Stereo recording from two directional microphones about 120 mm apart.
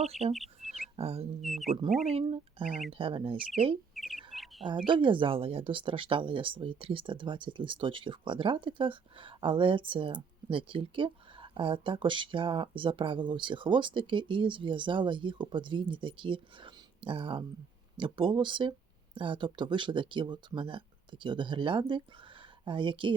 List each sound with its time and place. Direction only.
0.0 s speech: 60° right (ahead or behind)
0.6 s a sound: 65° right (ahead or behind)
1.4 s speech: centre (ahead or behind)
2.2 s speech: 50° right (ahead or behind)
3.9 s bird: centre (ahead or behind)
4.9 s speech: 45° right (ahead or behind)